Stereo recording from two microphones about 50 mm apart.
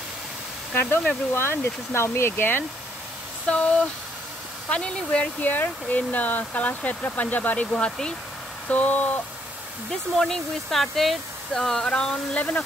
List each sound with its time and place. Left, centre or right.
0.7 s speech: left
4.6 s speech: left
5.4 s speech: left
7.7 s speech: centre
8.6 s speech: left
9.8 s speech: centre
12.4 s speech: left